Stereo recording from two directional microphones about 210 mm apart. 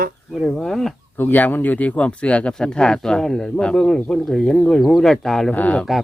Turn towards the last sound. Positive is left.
turn(degrees=5)  # may be behind; listen again after turning